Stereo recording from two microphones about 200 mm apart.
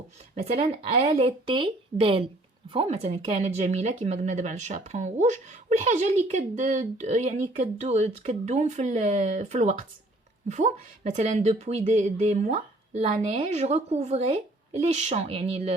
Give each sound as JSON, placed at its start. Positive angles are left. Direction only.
{"t": 0.3, "sound": "speech", "side_deg": -30}